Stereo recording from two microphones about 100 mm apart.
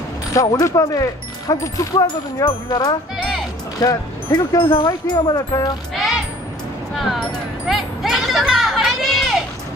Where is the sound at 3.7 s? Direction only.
35° left (ahead or behind).